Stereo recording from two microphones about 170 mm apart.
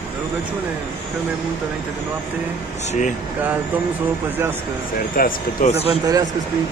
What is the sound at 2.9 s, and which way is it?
Speech, 45° left (ahead or behind).